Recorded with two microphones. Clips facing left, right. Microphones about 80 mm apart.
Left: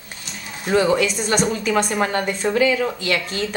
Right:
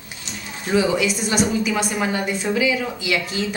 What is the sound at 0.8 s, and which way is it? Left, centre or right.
A woman's voice, centre.